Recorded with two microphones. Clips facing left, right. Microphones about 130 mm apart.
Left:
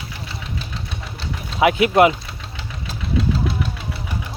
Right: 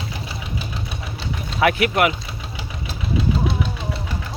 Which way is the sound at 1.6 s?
25° left (ahead or behind).